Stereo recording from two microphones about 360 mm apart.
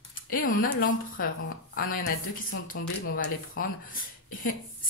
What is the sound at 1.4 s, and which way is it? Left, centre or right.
Speech, left.